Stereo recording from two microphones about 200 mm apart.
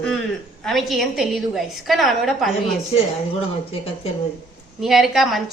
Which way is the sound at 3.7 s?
30° left (ahead or behind).